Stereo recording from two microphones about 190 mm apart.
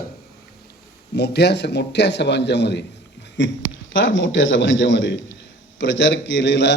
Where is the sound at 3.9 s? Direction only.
80° left.